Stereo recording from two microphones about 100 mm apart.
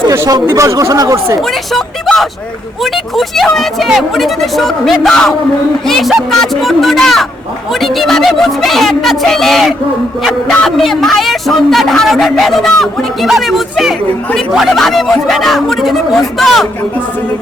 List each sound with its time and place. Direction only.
0.1 s speech: 35° right (ahead or behind)
1.4 s speech: centre (ahead or behind)